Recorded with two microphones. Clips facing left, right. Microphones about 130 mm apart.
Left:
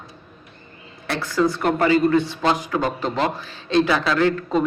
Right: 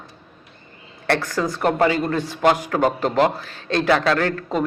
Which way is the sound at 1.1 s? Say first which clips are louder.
Left 3 dB; 45° right (ahead or behind).